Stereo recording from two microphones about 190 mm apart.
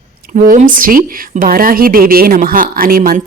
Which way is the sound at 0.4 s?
45° right (ahead or behind).